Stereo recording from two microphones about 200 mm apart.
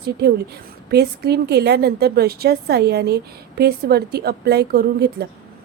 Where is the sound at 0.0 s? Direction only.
55° right (ahead or behind).